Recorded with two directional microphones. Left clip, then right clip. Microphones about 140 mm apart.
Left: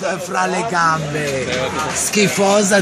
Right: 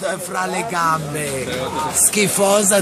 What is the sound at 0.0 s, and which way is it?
Speech, 15° left (ahead or behind).